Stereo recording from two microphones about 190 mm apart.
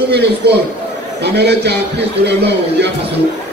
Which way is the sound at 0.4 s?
55° right (ahead or behind).